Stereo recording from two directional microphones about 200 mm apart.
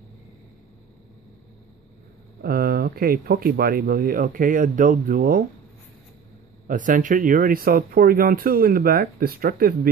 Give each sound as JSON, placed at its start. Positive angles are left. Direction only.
{"t": 2.4, "sound": "speech", "side_deg": -50}
{"t": 6.7, "sound": "speech", "side_deg": -40}